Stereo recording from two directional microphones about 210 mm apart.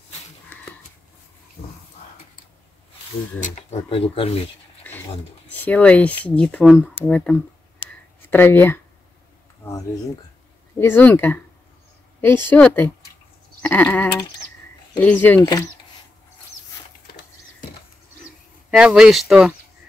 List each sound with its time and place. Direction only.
3.4 s speech: 30° left (ahead or behind)
5.5 s speech: 5° left (ahead or behind)
10.8 s speech: 10° left (ahead or behind)
13.6 s sheep: 10° left (ahead or behind)
15.0 s speech: 10° left (ahead or behind)
18.7 s speech: centre (ahead or behind)